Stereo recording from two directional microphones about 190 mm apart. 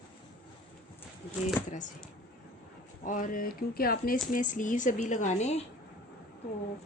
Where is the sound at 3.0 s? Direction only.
45° left (ahead or behind).